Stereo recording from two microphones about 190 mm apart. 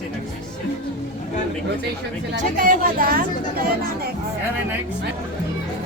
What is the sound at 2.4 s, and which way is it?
Speech, 45° right (ahead or behind).